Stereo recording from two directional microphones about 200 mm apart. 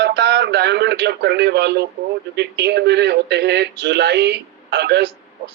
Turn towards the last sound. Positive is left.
turn(degrees=-55)  # may be behind; listen again after turning